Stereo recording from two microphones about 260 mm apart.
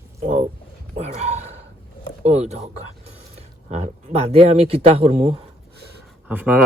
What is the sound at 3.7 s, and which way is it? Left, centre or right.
Speech, right.